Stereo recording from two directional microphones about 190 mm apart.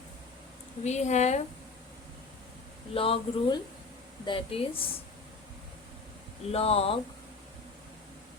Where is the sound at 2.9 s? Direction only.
30° left (ahead or behind).